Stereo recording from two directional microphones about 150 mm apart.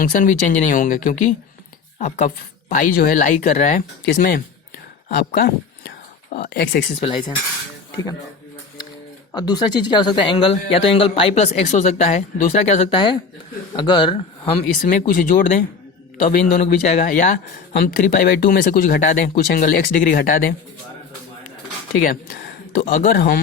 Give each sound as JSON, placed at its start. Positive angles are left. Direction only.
{"t": 0.0, "sound": "a man's voice", "side_deg": 60}
{"t": 6.3, "sound": "speech", "side_deg": 90}
{"t": 7.0, "sound": "speech", "side_deg": 35}
{"t": 9.3, "sound": "speech", "side_deg": 25}
{"t": 12.9, "sound": "speech", "side_deg": 35}
{"t": 14.8, "sound": "a man's voice", "side_deg": 60}
{"t": 22.0, "sound": "speech", "side_deg": 75}